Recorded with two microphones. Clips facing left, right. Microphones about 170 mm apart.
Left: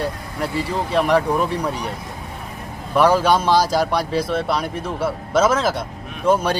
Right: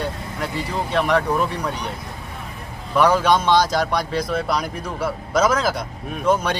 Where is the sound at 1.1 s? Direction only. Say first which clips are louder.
Left 2 dB; 5° left (ahead or behind).